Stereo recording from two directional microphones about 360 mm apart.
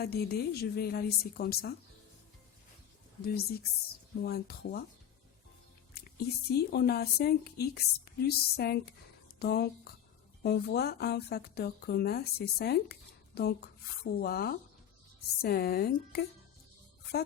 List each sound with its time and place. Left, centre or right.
0.0 s speech: left
3.2 s speech: left
5.9 s a sound: left
6.7 s speech: left